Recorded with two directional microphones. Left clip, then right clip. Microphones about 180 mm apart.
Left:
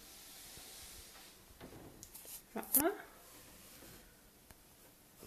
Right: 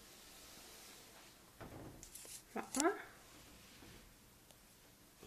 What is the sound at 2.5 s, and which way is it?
Speech, 15° left (ahead or behind).